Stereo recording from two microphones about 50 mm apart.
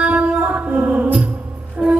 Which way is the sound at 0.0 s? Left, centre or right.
Right.